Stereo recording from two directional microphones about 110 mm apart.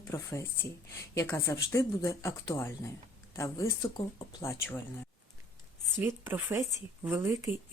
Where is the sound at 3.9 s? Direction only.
45° left (ahead or behind).